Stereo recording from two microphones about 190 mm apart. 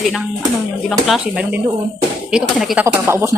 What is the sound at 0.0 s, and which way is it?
Speech, centre (ahead or behind).